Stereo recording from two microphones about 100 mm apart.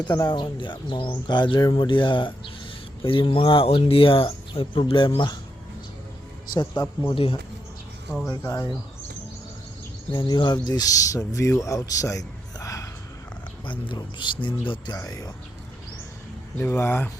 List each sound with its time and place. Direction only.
0.0 s speech: 45° left (ahead or behind)
6.5 s speech: 45° left (ahead or behind)
8.3 s speech: 35° left (ahead or behind)
10.1 s speech: 45° left (ahead or behind)
13.7 s speech: 50° left (ahead or behind)
16.6 s speech: 25° left (ahead or behind)